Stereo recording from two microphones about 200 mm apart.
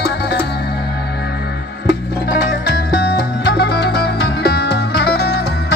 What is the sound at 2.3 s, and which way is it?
Music, 50° left (ahead or behind).